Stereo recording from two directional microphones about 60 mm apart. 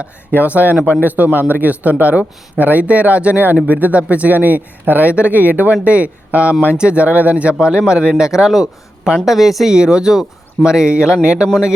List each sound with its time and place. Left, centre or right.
0.0 s a man's voice: right